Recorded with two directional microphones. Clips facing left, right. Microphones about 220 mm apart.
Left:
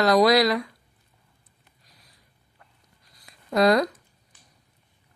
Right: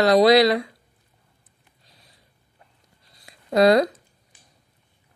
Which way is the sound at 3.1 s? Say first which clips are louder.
Right 3 dB; 25° right (ahead or behind).